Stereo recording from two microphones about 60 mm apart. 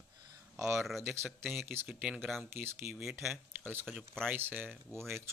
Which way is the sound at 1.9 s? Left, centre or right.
Right.